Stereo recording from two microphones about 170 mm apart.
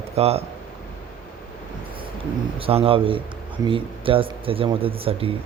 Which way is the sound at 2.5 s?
35° right (ahead or behind).